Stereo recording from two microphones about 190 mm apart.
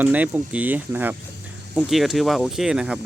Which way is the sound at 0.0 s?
10° right (ahead or behind).